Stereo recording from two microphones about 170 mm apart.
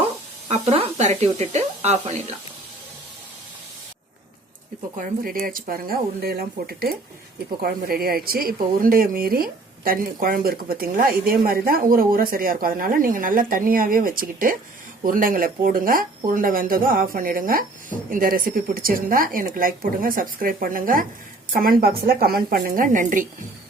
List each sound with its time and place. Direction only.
0.5 s speech: 40° right (ahead or behind)
4.9 s speech: 55° right (ahead or behind)